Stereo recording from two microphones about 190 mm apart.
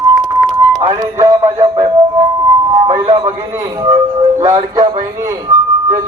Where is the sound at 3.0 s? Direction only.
30° right (ahead or behind).